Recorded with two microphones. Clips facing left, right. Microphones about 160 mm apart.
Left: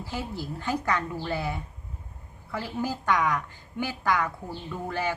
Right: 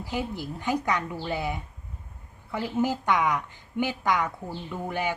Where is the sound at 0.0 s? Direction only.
15° right (ahead or behind).